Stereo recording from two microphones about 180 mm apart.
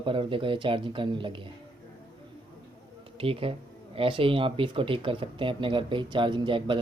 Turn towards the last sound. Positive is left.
turn(degrees=-25)  # may be behind; listen again after turning